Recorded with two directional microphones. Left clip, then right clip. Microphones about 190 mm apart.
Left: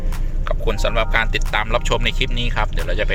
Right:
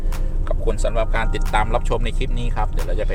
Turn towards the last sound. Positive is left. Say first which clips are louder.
# left 3 dB
turn(degrees=0)  # may be behind; listen again after turning